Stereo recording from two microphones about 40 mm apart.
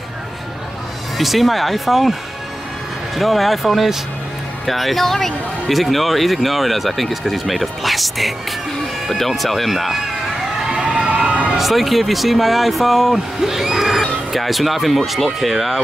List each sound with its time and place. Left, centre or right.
1.1 s speech: centre
3.2 s speech: centre
9.4 s a sound: centre
10.8 s crowd: right
11.5 s speech: centre